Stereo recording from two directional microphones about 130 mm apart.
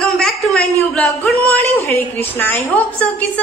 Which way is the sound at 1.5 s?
15° left (ahead or behind).